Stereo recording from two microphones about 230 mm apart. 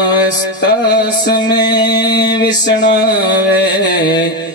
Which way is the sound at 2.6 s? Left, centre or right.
Left.